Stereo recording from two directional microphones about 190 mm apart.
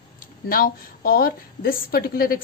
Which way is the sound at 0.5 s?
50° left (ahead or behind).